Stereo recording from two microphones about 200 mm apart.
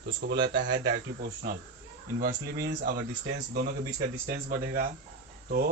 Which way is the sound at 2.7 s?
40° right (ahead or behind).